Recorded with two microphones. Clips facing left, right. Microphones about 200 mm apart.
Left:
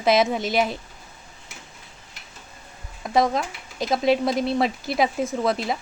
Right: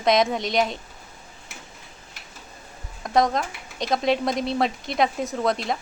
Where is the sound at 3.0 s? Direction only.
5° left (ahead or behind).